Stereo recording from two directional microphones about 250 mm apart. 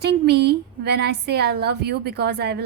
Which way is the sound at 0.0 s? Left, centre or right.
Right.